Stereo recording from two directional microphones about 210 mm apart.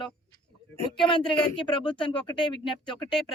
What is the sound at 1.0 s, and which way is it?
Speech, 25° left (ahead or behind).